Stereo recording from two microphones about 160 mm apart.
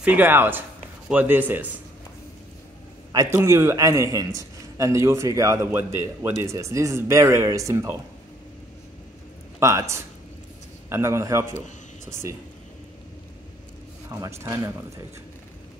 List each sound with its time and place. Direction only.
0.0 s speech: 10° right (ahead or behind)
3.1 s a man's voice: 20° right (ahead or behind)
9.6 s a man's voice: 20° right (ahead or behind)
14.1 s a man's voice: 20° right (ahead or behind)